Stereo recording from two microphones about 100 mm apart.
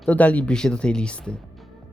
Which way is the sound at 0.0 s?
15° left (ahead or behind).